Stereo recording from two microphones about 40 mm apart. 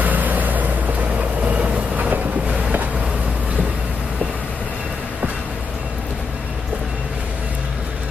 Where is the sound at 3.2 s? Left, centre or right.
Right.